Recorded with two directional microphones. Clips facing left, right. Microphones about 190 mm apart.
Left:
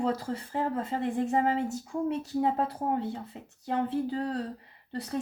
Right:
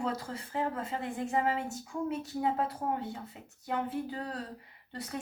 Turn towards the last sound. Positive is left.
turn(degrees=35)  # may be behind; listen again after turning